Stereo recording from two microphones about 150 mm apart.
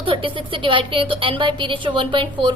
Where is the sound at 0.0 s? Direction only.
35° right (ahead or behind).